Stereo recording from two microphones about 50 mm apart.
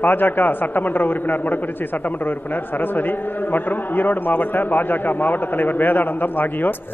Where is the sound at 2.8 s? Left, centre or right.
Left.